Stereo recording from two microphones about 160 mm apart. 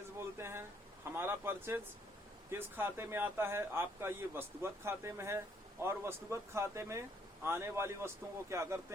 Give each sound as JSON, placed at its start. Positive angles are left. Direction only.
{"t": 0.3, "sound": "speech", "side_deg": -15}